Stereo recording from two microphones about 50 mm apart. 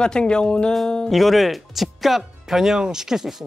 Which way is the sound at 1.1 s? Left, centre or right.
Centre.